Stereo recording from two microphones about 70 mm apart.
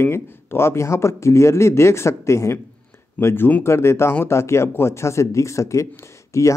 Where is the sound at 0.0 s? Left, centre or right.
Left.